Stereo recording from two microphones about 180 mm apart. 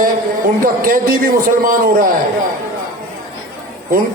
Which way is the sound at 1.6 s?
50° right (ahead or behind).